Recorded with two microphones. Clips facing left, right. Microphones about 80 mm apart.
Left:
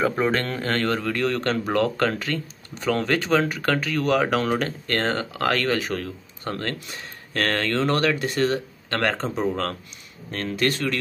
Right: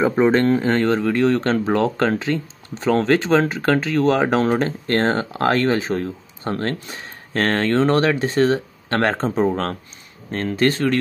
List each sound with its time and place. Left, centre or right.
0.0 s speech: centre